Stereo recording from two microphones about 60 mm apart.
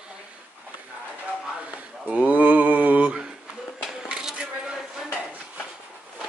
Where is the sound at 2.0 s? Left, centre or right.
Right.